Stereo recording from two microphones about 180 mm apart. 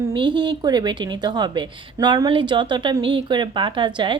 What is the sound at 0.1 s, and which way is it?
A woman's voice, 25° right (ahead or behind).